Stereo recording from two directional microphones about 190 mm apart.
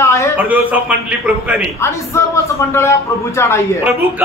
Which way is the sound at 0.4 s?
10° right (ahead or behind).